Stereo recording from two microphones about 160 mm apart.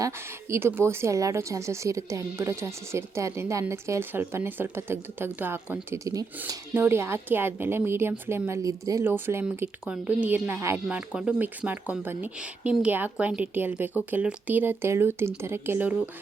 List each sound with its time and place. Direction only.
0.5 s speech: 15° right (ahead or behind)